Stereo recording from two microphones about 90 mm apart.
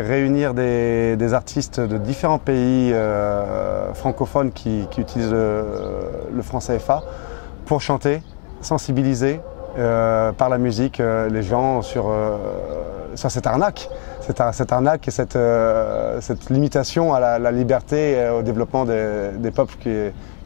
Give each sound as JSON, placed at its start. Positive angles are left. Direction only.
{"t": 0.0, "sound": "speech", "side_deg": 15}